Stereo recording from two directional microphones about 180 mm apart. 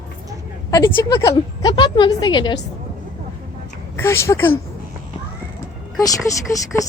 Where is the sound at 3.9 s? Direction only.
15° left (ahead or behind).